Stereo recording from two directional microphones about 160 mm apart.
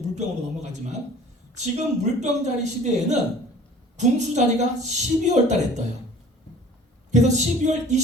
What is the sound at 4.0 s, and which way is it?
A woman's voice, 45° right (ahead or behind).